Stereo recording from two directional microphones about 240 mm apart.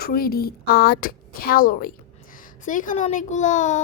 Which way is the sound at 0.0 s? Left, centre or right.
Left.